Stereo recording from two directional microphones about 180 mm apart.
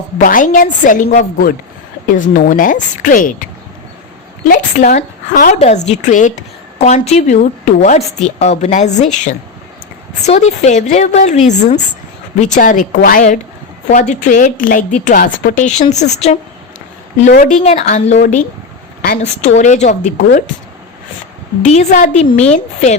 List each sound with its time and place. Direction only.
0.2 s a woman's voice: 50° left (ahead or behind)
4.7 s a woman's voice: 40° left (ahead or behind)
19.2 s a woman's voice: 40° left (ahead or behind)
21.6 s a woman's voice: 40° left (ahead or behind)